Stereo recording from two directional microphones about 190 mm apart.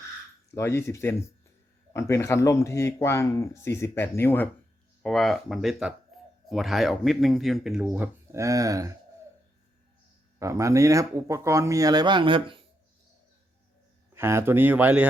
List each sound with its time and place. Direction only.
0.5 s speech: 15° left (ahead or behind)
5.0 s speech: centre (ahead or behind)
6.1 s a sound: centre (ahead or behind)
6.5 s speech: centre (ahead or behind); by 8.9 s 20° right (ahead or behind)
10.4 s speech: 15° right (ahead or behind)
14.2 s speech: 15° right (ahead or behind)